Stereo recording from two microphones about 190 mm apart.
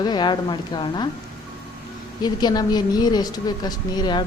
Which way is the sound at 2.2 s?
20° left (ahead or behind).